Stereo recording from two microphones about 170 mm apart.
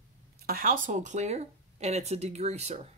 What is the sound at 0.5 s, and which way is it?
Speech, 55° right (ahead or behind).